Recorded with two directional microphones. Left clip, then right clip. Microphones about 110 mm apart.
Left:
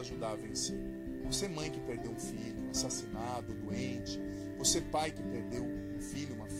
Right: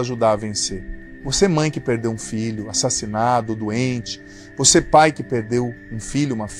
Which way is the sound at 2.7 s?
15° right (ahead or behind).